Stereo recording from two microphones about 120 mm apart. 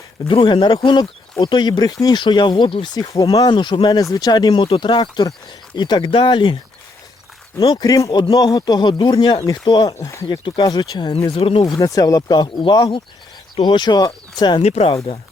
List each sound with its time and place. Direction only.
0.3 s speech: 45° left (ahead or behind)
7.6 s speech: 30° left (ahead or behind)
11.3 s speech: 50° left (ahead or behind)
11.7 s speech: 30° left (ahead or behind)
14.6 s speech: 55° left (ahead or behind)